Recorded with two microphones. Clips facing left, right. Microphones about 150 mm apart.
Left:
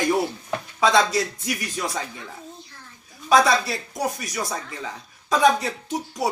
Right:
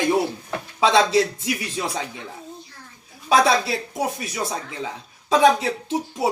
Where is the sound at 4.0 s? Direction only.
25° right (ahead or behind).